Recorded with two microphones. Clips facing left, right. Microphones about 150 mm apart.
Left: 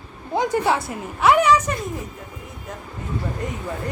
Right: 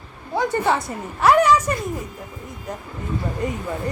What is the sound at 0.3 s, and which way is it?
A woman's voice, 10° left (ahead or behind).